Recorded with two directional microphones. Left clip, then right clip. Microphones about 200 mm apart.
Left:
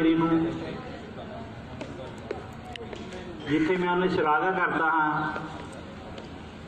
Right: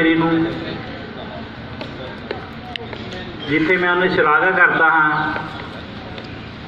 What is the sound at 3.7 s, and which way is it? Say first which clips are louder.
A man's voice: right 12 dB; 50° left (ahead or behind).